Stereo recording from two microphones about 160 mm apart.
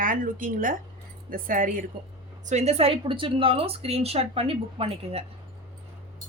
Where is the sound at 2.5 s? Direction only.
45° right (ahead or behind).